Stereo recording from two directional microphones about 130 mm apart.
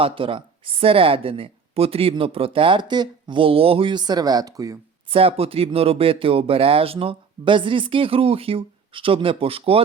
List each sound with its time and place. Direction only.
0.0 s a woman's voice: 40° right (ahead or behind); by 4.8 s 25° right (ahead or behind)
5.1 s a woman's voice: 45° right (ahead or behind)